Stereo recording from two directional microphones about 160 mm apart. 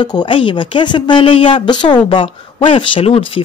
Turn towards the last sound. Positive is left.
turn(degrees=35)  # may be behind; listen again after turning